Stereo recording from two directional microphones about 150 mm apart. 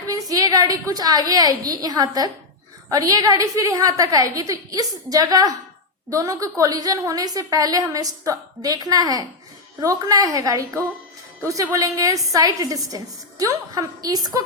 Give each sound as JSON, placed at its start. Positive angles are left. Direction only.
{"t": 0.1, "sound": "a woman's voice", "side_deg": -25}